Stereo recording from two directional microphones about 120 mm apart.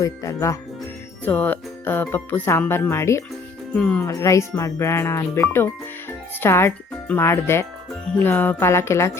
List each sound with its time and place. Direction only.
0.0 s speech: 25° left (ahead or behind)
1.2 s speech: 15° left (ahead or behind)
3.8 s speech: 10° left (ahead or behind)
4.0 s speech: 25° left (ahead or behind)